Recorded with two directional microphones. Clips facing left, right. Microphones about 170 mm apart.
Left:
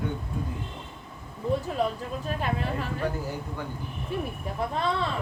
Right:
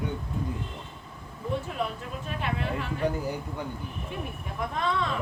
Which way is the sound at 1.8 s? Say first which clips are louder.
Left 4 dB; 35° left (ahead or behind).